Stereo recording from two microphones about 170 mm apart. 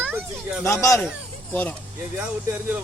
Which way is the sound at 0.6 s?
20° left (ahead or behind).